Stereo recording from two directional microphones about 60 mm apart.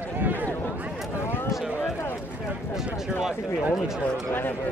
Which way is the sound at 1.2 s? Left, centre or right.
Left.